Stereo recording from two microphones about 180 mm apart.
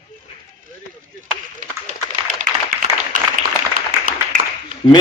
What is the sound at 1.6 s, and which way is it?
Run, 45° right (ahead or behind).